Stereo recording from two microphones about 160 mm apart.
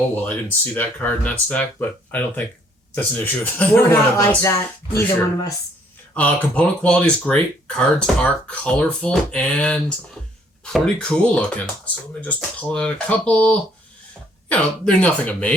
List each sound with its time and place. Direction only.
0.3 s speech: 10° left (ahead or behind)
6.1 s speech: 10° left (ahead or behind)